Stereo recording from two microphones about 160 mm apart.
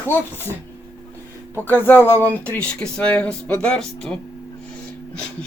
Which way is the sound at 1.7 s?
15° left (ahead or behind).